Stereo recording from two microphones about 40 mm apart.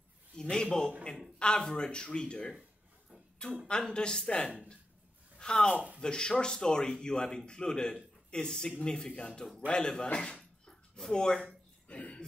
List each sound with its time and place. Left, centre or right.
0.4 s a man's voice: centre
3.6 s speech: left
10.1 s a sound: left